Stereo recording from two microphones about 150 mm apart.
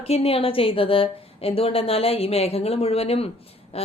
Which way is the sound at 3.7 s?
40° left (ahead or behind).